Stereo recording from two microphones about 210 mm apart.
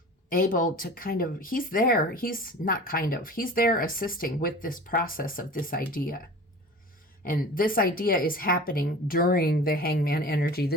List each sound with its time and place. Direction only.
0.3 s speech: 40° left (ahead or behind)
7.3 s a woman's voice: 45° left (ahead or behind)